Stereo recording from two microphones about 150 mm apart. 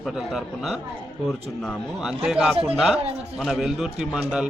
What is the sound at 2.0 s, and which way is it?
A man's voice, 5° right (ahead or behind).